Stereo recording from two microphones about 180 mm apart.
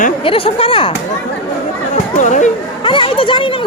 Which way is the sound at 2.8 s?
30° left (ahead or behind).